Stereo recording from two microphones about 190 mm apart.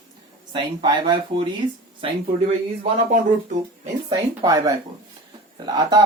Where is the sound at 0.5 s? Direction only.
25° right (ahead or behind).